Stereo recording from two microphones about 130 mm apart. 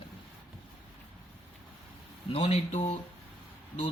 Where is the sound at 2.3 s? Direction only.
50° left (ahead or behind).